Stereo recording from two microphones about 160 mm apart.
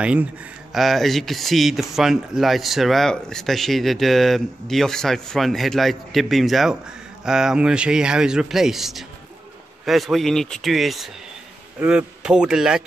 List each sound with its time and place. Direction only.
0.0 s speech: 5° right (ahead or behind)